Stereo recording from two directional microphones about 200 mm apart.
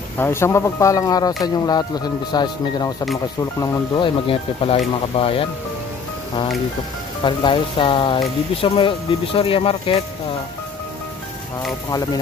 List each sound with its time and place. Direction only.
0.2 s speech: 10° left (ahead or behind)
7.2 s speech: 25° left (ahead or behind)
11.9 s speech: 20° left (ahead or behind)